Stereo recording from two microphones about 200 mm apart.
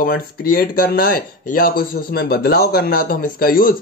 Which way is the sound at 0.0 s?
50° left (ahead or behind).